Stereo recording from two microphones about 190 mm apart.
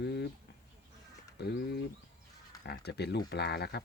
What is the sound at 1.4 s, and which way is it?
Speech, 60° left (ahead or behind).